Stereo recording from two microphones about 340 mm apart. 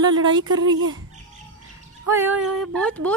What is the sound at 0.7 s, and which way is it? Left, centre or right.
Speech, right.